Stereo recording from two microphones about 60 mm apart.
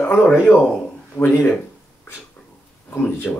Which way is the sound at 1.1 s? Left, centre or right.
Left.